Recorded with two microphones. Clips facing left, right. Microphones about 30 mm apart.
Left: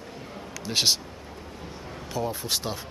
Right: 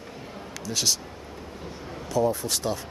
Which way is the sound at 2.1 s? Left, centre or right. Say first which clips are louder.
Right 5 dB; left.